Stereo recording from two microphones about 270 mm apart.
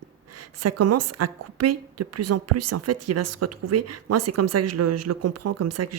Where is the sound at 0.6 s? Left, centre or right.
Right.